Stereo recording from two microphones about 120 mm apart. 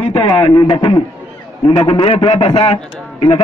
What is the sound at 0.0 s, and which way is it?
A man's voice, 55° left (ahead or behind).